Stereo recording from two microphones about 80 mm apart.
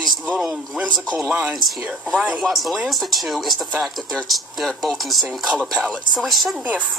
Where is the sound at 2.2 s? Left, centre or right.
Centre.